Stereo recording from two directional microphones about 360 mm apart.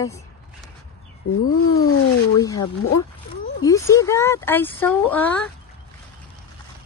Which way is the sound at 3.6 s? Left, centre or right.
Centre.